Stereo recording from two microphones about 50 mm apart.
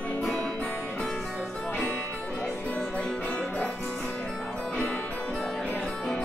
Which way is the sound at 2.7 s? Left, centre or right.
Left.